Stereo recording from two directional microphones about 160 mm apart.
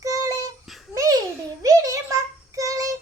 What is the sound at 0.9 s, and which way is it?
Babbling, 25° right (ahead or behind).